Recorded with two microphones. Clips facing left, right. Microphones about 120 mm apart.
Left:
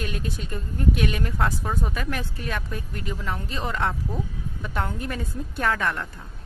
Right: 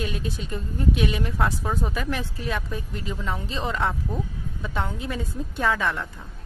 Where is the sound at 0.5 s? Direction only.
20° right (ahead or behind).